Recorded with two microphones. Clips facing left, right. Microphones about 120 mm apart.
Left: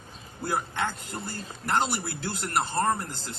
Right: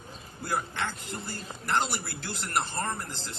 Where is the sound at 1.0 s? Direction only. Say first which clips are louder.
Left 1 dB; 45° left (ahead or behind).